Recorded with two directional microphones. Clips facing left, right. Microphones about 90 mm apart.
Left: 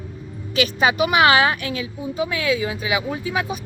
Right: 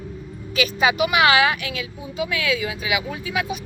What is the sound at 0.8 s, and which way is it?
Speech, 40° left (ahead or behind).